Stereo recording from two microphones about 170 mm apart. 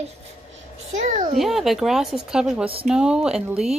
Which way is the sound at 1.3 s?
Centre (ahead or behind).